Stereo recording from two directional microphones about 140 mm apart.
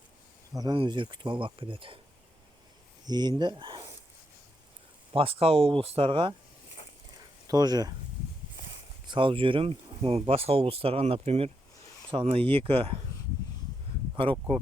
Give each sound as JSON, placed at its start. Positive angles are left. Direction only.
{"t": 0.5, "sound": "speech", "side_deg": -30}
{"t": 3.1, "sound": "speech", "side_deg": -30}
{"t": 5.1, "sound": "speech", "side_deg": -40}
{"t": 7.4, "sound": "speech", "side_deg": -30}
{"t": 9.0, "sound": "speech", "side_deg": -35}
{"t": 14.2, "sound": "speech", "side_deg": -40}